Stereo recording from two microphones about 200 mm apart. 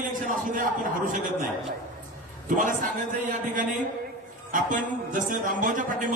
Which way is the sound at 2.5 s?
40° right (ahead or behind).